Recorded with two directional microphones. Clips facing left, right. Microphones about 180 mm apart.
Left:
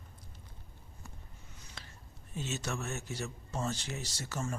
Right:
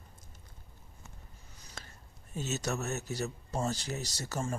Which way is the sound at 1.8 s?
45° right (ahead or behind).